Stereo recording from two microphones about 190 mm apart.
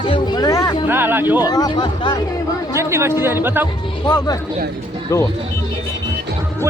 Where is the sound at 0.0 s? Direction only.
25° left (ahead or behind).